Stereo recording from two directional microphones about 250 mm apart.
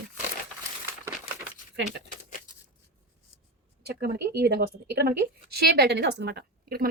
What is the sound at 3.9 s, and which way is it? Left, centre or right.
A woman's voice, right.